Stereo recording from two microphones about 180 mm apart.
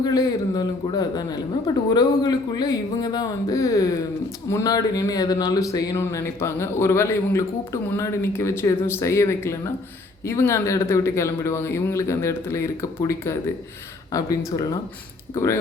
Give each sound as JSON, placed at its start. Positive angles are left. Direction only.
{"t": 0.0, "sound": "a woman's voice", "side_deg": 20}
{"t": 14.1, "sound": "a woman's voice", "side_deg": 20}